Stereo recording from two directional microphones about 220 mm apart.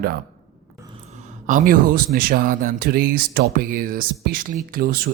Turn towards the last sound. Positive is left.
turn(degrees=-40)  # may be behind; listen again after turning